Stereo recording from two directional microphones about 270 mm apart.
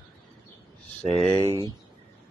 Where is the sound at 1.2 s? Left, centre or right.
Right.